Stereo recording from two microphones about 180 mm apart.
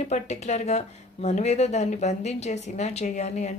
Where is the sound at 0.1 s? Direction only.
40° left (ahead or behind).